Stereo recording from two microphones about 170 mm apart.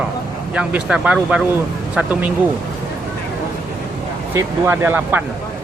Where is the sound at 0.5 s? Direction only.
5° right (ahead or behind).